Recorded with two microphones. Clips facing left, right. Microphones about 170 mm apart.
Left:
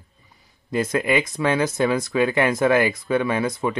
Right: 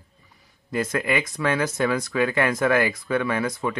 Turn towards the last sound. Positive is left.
turn(degrees=20)  # may be behind; listen again after turning